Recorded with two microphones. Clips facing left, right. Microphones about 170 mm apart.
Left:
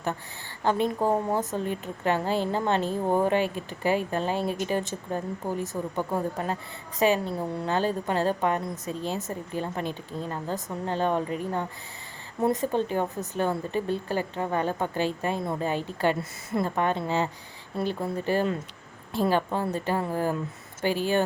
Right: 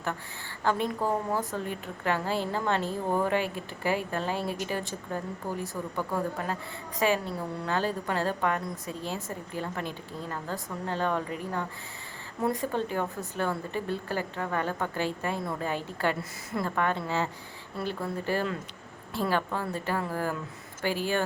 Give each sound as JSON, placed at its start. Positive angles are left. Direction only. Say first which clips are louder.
{"t": 0.6, "sound": "a woman's voice", "louder": "left 3 dB", "side_deg": 20}